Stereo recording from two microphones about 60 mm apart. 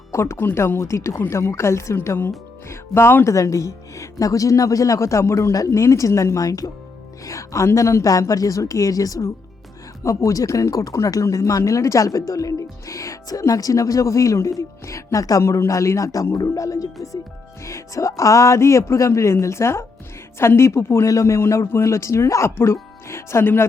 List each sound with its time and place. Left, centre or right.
0.1 s speech: left
3.2 s speech: left
8.3 s speech: left
10.0 s speech: left
21.1 s speech: left